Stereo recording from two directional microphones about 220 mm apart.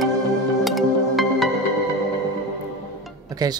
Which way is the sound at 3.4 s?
15° right (ahead or behind).